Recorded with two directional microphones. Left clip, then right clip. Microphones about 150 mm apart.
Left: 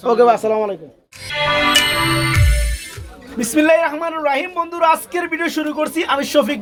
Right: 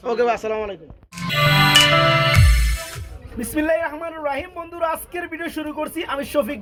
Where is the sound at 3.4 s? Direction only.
25° right (ahead or behind).